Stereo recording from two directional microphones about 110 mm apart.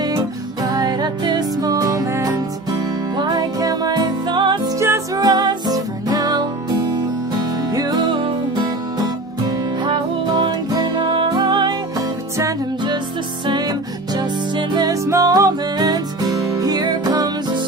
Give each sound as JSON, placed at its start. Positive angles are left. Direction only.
{"t": 0.0, "sound": "music", "side_deg": -40}
{"t": 3.2, "sound": "music", "side_deg": -40}
{"t": 7.7, "sound": "music", "side_deg": -35}